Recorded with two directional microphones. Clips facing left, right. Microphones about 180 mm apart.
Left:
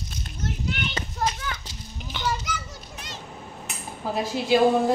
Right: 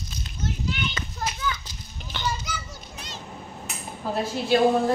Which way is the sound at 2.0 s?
10° left (ahead or behind).